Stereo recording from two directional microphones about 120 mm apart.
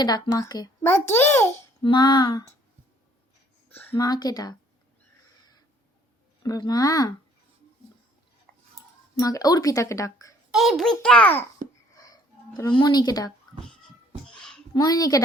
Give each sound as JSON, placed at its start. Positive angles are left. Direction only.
{"t": 0.0, "sound": "speech", "side_deg": 30}
{"t": 0.8, "sound": "speech", "side_deg": 20}
{"t": 1.8, "sound": "speech", "side_deg": 40}
{"t": 3.7, "sound": "a sound", "side_deg": 15}
{"t": 3.9, "sound": "speech", "side_deg": 35}
{"t": 6.4, "sound": "speech", "side_deg": 35}
{"t": 9.1, "sound": "speech", "side_deg": 30}
{"t": 10.5, "sound": "a child's voice", "side_deg": 0}
{"t": 11.9, "sound": "a sound", "side_deg": 30}
{"t": 14.3, "sound": "music", "side_deg": 5}
{"t": 14.7, "sound": "speech", "side_deg": 35}